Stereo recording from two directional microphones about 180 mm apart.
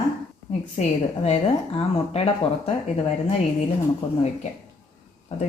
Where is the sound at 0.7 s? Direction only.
40° left (ahead or behind).